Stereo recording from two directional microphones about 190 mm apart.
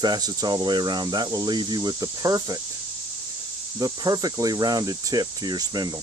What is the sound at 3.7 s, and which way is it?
Speech, 20° right (ahead or behind).